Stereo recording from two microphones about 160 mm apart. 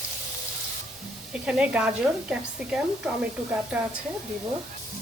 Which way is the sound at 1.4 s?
5° right (ahead or behind).